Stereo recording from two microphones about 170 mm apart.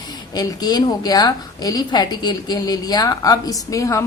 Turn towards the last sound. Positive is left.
turn(degrees=20)  # may be behind; listen again after turning